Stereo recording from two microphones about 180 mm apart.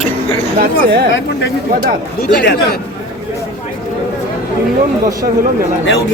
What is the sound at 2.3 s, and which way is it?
Speech, 70° left (ahead or behind).